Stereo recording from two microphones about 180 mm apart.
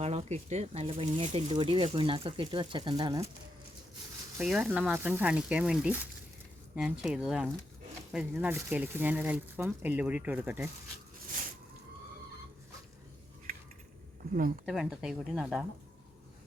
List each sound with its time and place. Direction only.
0.0 s speech: 35° right (ahead or behind)
4.4 s speech: 5° right (ahead or behind)
14.6 s speech: 5° right (ahead or behind)